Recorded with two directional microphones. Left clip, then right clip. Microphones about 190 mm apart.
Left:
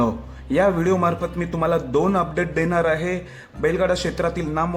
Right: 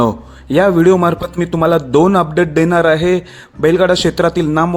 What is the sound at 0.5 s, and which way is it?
A man's voice, 45° right (ahead or behind).